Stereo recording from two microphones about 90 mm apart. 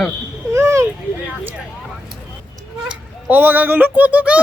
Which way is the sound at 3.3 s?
20° right (ahead or behind).